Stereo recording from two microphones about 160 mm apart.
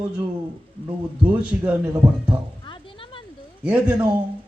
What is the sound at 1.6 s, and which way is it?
Music, 10° right (ahead or behind).